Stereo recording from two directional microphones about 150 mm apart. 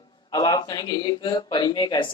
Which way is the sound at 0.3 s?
25° left (ahead or behind).